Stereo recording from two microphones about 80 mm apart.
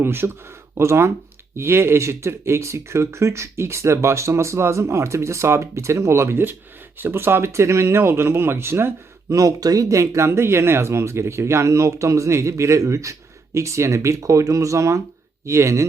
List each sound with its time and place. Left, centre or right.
0.0 s speech: right
9.3 s speech: right